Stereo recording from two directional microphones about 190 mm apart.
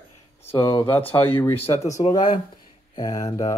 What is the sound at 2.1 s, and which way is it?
Speech, 25° left (ahead or behind).